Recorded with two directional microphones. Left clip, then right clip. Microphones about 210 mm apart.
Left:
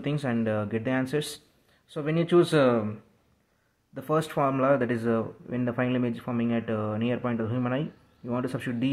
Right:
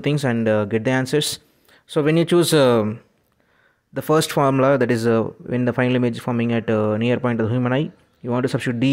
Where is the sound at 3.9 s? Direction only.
45° right (ahead or behind).